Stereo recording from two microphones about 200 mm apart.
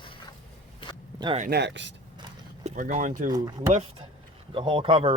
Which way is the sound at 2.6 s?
40° right (ahead or behind).